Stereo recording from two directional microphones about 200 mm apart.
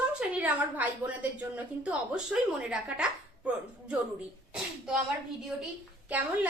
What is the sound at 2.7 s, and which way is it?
Speech, 5° right (ahead or behind).